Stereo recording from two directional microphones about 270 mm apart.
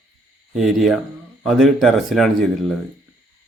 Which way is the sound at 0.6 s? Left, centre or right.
Centre.